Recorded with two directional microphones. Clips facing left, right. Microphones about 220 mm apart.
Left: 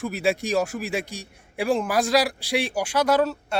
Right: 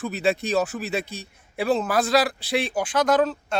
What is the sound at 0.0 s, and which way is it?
Speech, 10° left (ahead or behind).